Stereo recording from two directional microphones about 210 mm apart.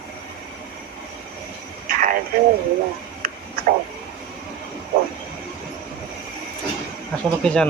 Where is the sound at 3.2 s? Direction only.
45° right (ahead or behind).